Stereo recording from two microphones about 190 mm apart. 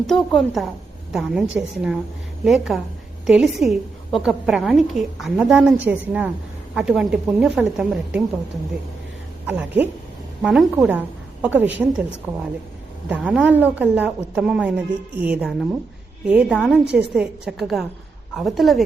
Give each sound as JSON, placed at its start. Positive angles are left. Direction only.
{"t": 0.1, "sound": "a woman's voice", "side_deg": 0}
{"t": 9.5, "sound": "a woman's voice", "side_deg": -10}
{"t": 13.1, "sound": "a woman's voice", "side_deg": -5}